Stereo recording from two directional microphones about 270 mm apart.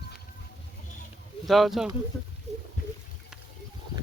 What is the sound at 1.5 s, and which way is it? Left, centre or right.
Speech, centre.